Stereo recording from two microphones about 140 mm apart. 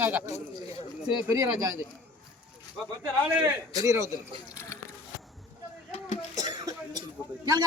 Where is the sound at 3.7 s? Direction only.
25° right (ahead or behind).